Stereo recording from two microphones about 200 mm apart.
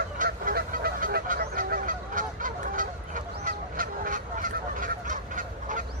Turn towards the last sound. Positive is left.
turn(degrees=-40)  # may be behind; listen again after turning